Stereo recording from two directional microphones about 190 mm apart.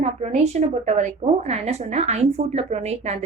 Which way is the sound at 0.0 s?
35° right (ahead or behind).